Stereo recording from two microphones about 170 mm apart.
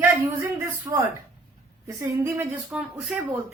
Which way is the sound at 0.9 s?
15° right (ahead or behind).